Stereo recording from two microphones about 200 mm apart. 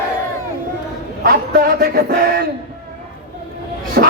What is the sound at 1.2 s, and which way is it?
Speech, 50° right (ahead or behind).